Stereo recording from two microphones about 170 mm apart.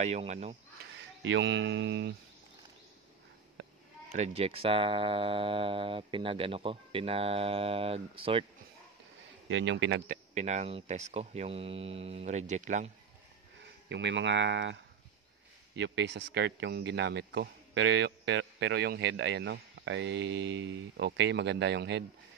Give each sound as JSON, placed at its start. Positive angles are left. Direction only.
{"t": 0.0, "sound": "speech", "side_deg": -40}
{"t": 1.3, "sound": "speech", "side_deg": -90}
{"t": 4.2, "sound": "speech", "side_deg": -35}
{"t": 9.7, "sound": "speech", "side_deg": -90}
{"t": 10.0, "sound": "speech", "side_deg": -40}
{"t": 13.8, "sound": "speech", "side_deg": -90}